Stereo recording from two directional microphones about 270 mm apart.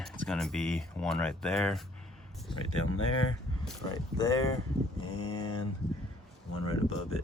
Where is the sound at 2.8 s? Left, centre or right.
Left.